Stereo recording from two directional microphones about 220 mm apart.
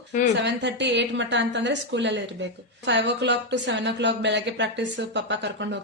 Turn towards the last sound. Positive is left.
turn(degrees=-50)  # may be behind; listen again after turning